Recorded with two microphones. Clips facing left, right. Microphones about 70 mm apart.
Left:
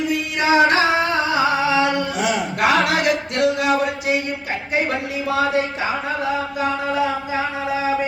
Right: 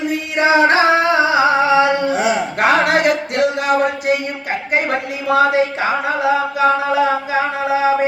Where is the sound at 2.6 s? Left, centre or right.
Right.